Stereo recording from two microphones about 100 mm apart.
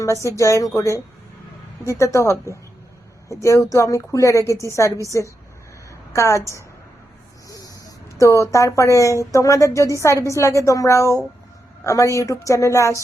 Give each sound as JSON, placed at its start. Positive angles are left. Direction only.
{"t": 0.0, "sound": "speech", "side_deg": 30}
{"t": 3.4, "sound": "speech", "side_deg": 35}
{"t": 6.1, "sound": "speech", "side_deg": 30}
{"t": 7.4, "sound": "snake", "side_deg": 35}
{"t": 8.2, "sound": "speech", "side_deg": 30}